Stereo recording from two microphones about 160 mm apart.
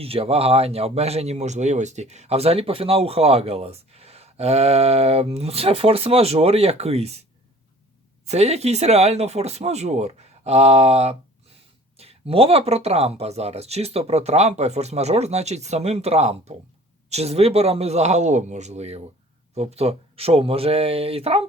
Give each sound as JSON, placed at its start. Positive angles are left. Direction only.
{"t": 0.0, "sound": "a man's voice", "side_deg": -35}
{"t": 8.3, "sound": "a man's voice", "side_deg": -40}